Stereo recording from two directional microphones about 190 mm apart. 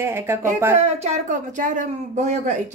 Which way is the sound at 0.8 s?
35° right (ahead or behind).